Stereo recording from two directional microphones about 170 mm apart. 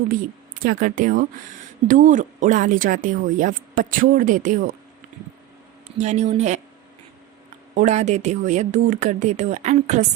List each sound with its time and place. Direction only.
0.6 s speech: 55° right (ahead or behind)
6.0 s speech: 45° right (ahead or behind)
7.8 s speech: 45° right (ahead or behind)